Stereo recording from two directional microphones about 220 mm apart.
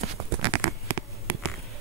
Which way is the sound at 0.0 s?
25° right (ahead or behind).